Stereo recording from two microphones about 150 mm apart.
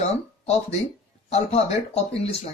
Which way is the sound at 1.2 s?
45° left (ahead or behind).